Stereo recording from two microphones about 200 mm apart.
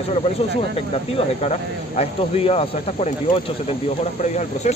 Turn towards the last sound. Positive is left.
turn(degrees=35)  # may be behind; listen again after turning